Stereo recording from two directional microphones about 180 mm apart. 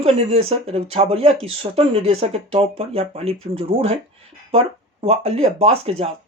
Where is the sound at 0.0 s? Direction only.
35° right (ahead or behind).